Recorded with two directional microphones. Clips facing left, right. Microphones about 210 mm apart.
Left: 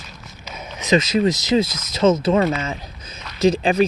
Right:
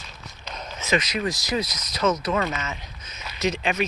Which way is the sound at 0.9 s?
25° left (ahead or behind).